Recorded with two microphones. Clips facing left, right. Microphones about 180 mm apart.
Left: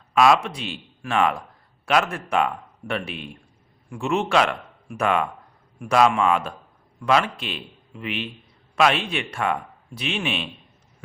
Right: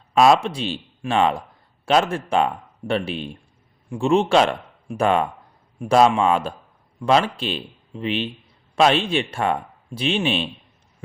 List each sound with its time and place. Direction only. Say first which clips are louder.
0.1 s speech: right 2 dB; 30° right (ahead or behind)